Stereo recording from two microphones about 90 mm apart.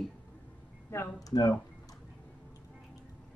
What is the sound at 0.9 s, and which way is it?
Speech, 35° left (ahead or behind).